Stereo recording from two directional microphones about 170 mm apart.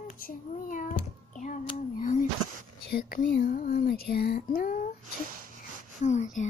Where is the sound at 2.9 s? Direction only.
60° left (ahead or behind).